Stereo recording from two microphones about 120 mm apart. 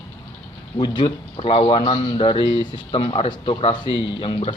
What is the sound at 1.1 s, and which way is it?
Speech, 50° left (ahead or behind).